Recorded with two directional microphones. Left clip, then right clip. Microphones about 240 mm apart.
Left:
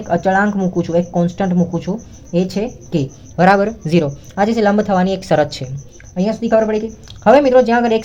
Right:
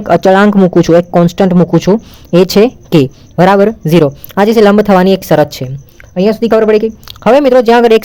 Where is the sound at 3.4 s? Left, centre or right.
Right.